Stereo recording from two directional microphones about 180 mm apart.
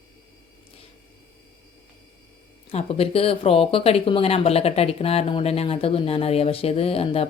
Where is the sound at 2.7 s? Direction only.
35° left (ahead or behind).